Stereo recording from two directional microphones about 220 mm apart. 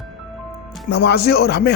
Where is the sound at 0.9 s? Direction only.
50° left (ahead or behind).